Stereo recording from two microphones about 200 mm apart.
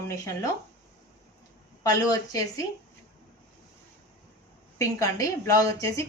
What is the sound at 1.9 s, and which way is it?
Speech, 20° left (ahead or behind).